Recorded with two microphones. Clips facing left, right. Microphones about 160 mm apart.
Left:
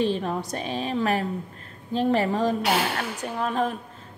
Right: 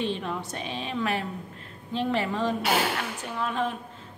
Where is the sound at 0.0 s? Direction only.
40° left (ahead or behind).